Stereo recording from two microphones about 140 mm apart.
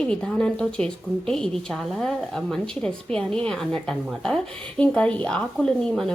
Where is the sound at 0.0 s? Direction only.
5° left (ahead or behind).